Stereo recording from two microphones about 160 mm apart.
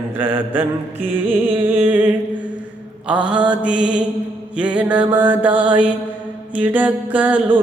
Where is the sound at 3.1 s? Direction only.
10° right (ahead or behind).